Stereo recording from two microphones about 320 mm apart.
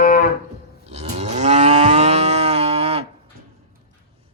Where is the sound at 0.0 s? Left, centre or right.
Left.